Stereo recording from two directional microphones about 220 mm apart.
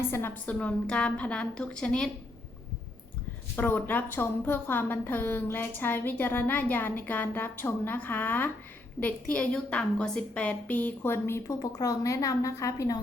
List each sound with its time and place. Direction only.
0.1 s a woman's voice: 10° left (ahead or behind)
3.5 s a woman's voice: 10° left (ahead or behind)